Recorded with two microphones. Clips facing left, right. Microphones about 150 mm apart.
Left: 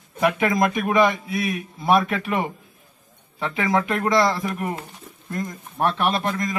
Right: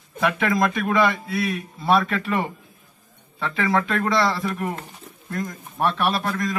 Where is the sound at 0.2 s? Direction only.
15° left (ahead or behind).